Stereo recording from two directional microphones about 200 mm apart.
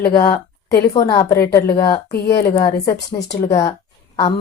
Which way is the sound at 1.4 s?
50° left (ahead or behind).